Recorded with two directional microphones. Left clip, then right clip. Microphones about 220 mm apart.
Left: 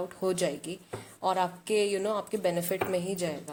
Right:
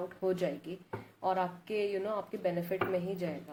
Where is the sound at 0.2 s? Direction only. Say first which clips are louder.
Left 3 dB; 40° left (ahead or behind).